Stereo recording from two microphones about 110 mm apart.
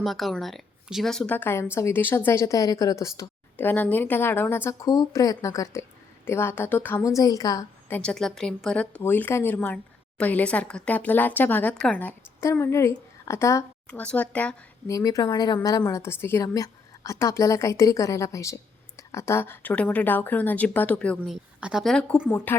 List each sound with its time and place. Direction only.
0.0 s speech: centre (ahead or behind)
1.4 s a woman's voice: 20° left (ahead or behind)
4.8 s a woman's voice: 30° left (ahead or behind)
7.0 s a woman's voice: 30° left (ahead or behind)
7.9 s a woman's voice: 20° left (ahead or behind)
8.1 s a woman's voice: 5° left (ahead or behind); by 13.7 s 25° left (ahead or behind)
13.9 s speech: 10° left (ahead or behind)
14.8 s a woman's voice: 30° left (ahead or behind)
15.8 s a woman's voice: 25° left (ahead or behind)
21.2 s speech: 5° right (ahead or behind)
22.3 s speech: 20° left (ahead or behind)